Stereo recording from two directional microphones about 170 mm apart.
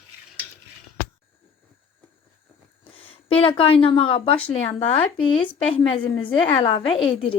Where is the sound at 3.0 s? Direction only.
35° left (ahead or behind).